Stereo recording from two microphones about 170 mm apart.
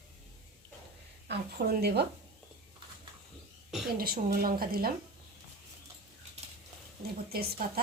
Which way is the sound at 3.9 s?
60° right (ahead or behind).